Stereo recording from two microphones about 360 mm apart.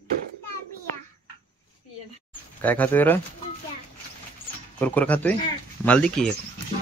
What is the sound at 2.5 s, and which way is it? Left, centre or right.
Speech, centre.